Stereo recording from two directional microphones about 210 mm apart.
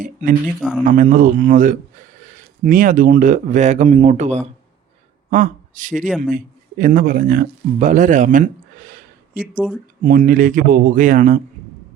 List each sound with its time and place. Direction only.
0.0 s speech: 40° right (ahead or behind)
0.4 s speech: 5° left (ahead or behind)
0.9 s speech: 40° right (ahead or behind)
6.1 s speech: 5° right (ahead or behind)
6.3 s speech: 40° right (ahead or behind)
10.0 s speech: 40° right (ahead or behind)